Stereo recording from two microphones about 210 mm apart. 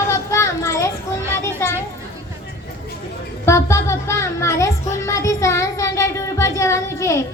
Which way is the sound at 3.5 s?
15° left (ahead or behind).